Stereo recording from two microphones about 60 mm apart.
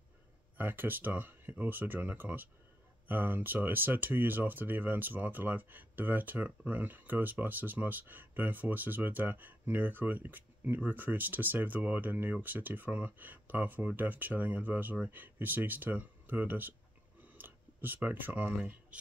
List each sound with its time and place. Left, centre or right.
0.6 s speech: right